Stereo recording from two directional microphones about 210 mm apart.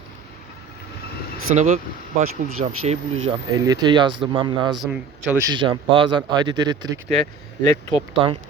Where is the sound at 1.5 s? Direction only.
35° right (ahead or behind).